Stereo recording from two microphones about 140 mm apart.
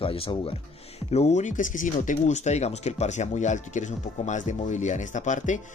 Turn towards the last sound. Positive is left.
turn(degrees=60)  # may be behind; listen again after turning